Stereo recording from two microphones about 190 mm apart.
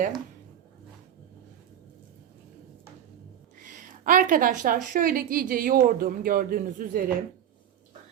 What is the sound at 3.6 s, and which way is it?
A woman's voice, 45° right (ahead or behind).